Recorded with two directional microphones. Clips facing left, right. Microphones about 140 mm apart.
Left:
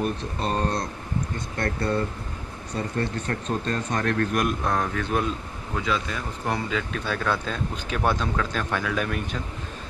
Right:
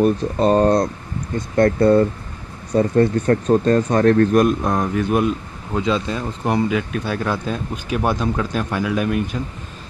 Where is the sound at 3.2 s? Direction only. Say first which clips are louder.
Right 12 dB; 45° right (ahead or behind); by 4.5 s 30° right (ahead or behind).